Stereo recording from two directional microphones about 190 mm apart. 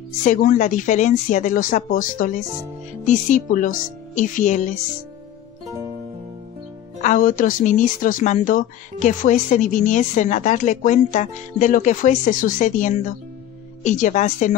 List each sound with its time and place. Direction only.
0.2 s speech: 40° left (ahead or behind)
7.0 s speech: 40° left (ahead or behind)